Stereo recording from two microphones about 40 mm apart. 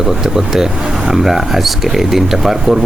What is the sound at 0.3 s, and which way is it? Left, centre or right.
Speech, centre.